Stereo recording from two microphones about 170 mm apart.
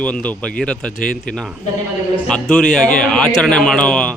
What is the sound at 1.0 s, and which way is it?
Speech, 55° left (ahead or behind).